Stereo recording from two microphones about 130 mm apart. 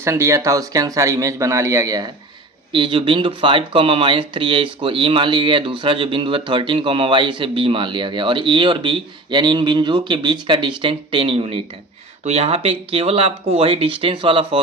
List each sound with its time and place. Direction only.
0.0 s speech: 20° right (ahead or behind)
2.7 s speech: 40° right (ahead or behind)